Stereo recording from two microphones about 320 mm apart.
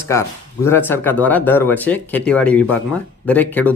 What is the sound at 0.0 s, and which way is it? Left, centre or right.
Speech, centre.